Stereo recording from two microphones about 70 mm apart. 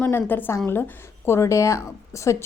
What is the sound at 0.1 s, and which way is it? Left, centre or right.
A woman's voice, left.